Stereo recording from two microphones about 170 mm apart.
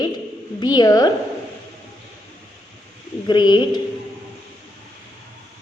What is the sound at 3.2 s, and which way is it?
Speech, 25° left (ahead or behind).